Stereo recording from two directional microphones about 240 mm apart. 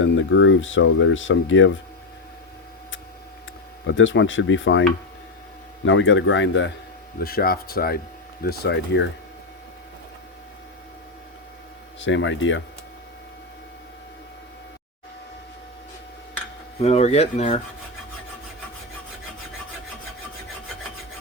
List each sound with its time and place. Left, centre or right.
0.0 s speech: left
3.8 s speech: left
11.9 s speech: left
16.8 s speech: left